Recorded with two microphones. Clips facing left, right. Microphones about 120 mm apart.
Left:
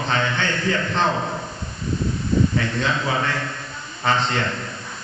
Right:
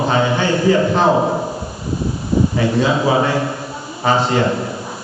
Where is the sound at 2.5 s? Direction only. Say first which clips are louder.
Right 7 dB; 15° right (ahead or behind).